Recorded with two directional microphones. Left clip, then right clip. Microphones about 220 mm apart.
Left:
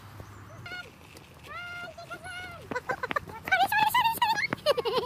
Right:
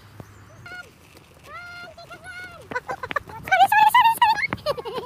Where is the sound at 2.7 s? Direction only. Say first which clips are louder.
Right 3 dB; 5° right (ahead or behind).